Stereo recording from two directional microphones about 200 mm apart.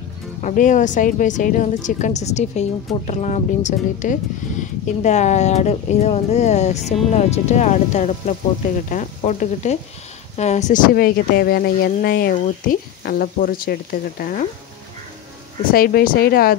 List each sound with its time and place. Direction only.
0.4 s speech: 40° left (ahead or behind)
15.7 s speech: 45° left (ahead or behind)